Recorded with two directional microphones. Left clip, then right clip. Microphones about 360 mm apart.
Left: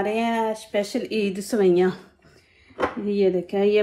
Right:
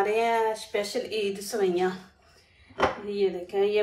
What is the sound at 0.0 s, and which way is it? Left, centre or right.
A woman's voice, left.